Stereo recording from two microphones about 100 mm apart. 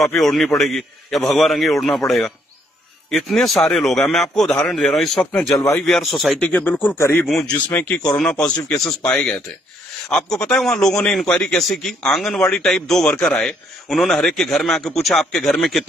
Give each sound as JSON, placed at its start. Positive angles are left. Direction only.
{"t": 0.0, "sound": "a man's voice", "side_deg": 5}
{"t": 6.4, "sound": "a man's voice", "side_deg": 15}
{"t": 7.2, "sound": "a man's voice", "side_deg": 0}
{"t": 7.5, "sound": "a man's voice", "side_deg": 15}